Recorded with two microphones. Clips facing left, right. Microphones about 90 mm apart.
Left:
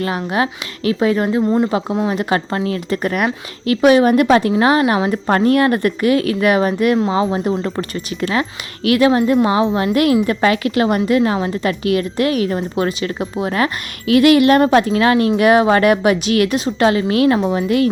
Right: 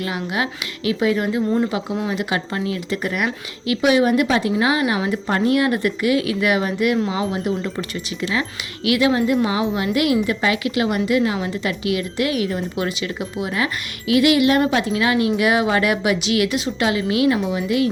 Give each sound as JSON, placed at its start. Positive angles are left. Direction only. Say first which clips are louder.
{"t": 0.0, "sound": "a woman's voice", "louder": "left 5 dB", "side_deg": 40}
{"t": 2.0, "sound": "speech", "louder": "left 5 dB", "side_deg": 35}
{"t": 4.9, "sound": "a woman's voice", "louder": "left 4 dB", "side_deg": 35}
{"t": 5.2, "sound": "a woman's voice", "louder": "left 4 dB", "side_deg": 50}